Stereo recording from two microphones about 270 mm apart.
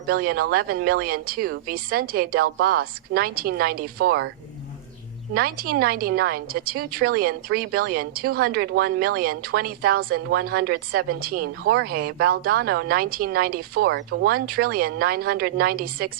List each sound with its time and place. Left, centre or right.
0.1 s a woman's voice: right
5.3 s a woman's voice: right